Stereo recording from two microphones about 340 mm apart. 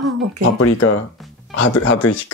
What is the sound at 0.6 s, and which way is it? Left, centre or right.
Speech, left.